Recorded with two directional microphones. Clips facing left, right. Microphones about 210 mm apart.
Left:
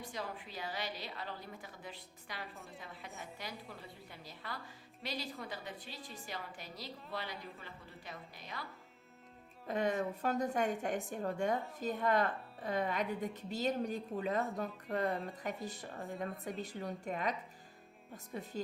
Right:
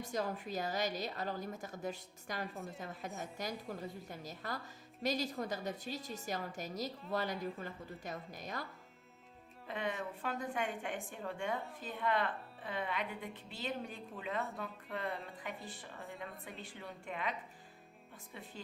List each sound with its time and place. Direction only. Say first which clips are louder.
0.0 s a woman's voice: right 5 dB; 45° right (ahead or behind)
9.6 s a woman's voice: left 5 dB; 40° left (ahead or behind)